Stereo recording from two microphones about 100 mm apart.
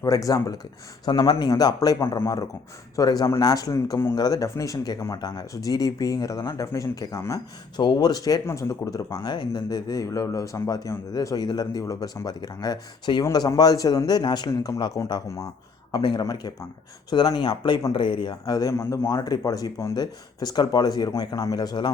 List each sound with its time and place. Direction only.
0.0 s speech: 35° left (ahead or behind)
1.0 s a man's voice: 45° left (ahead or behind); by 4.1 s 30° left (ahead or behind)
4.1 s speech: 40° left (ahead or behind)
7.8 s speech: 45° left (ahead or behind)
8.4 s speech: 25° left (ahead or behind)
9.2 s speech: 50° left (ahead or behind); by 15.4 s 35° left (ahead or behind)
15.9 s a man's voice: 50° left (ahead or behind)
16.2 s a man's voice: 40° left (ahead or behind)